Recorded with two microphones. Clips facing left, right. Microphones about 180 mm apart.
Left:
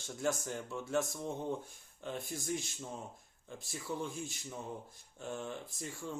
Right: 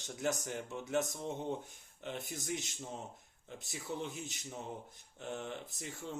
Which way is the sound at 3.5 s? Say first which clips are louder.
Left 1 dB; 20° right (ahead or behind).